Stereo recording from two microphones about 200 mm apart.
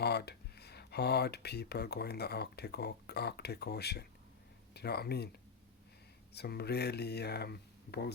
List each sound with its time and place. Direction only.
0.0 s speech: 55° left (ahead or behind)
6.3 s speech: 55° left (ahead or behind)